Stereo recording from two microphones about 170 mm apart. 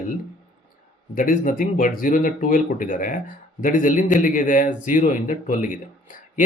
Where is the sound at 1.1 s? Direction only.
50° left (ahead or behind).